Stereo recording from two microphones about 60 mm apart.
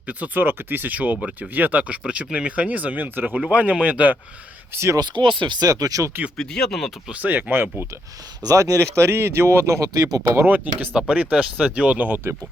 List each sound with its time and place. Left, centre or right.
0.1 s speech: right
4.7 s speech: right
5.2 s speech: left
5.6 s speech: right
6.3 s speech: centre
7.1 s speech: right
7.5 s speech: right
8.4 s speech: right
10.4 s speech: right